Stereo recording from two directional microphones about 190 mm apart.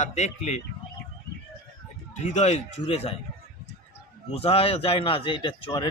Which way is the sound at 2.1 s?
40° left (ahead or behind).